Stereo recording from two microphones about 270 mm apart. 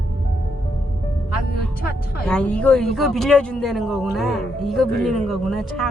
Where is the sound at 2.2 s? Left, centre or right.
Centre.